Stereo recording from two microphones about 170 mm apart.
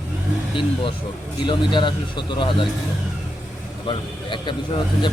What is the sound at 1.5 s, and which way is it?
Speech, 25° left (ahead or behind).